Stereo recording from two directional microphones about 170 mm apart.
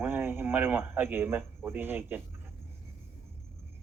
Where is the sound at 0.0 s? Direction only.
15° right (ahead or behind).